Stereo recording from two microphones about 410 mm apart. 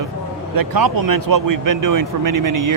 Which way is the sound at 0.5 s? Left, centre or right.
Right.